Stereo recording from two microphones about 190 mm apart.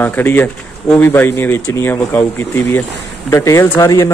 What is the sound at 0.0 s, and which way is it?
A man's voice, 10° left (ahead or behind).